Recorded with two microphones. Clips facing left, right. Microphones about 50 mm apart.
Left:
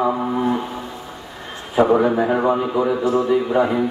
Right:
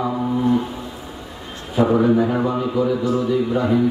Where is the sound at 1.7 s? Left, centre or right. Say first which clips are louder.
Left 1 dB; left.